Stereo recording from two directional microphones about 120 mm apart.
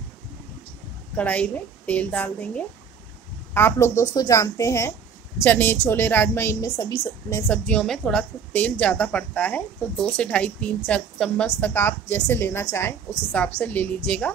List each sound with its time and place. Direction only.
1.1 s a woman's voice: 10° left (ahead or behind)
6.8 s a woman's voice: 30° left (ahead or behind)
7.4 s a woman's voice: 10° left (ahead or behind)
11.4 s a woman's voice: 15° left (ahead or behind)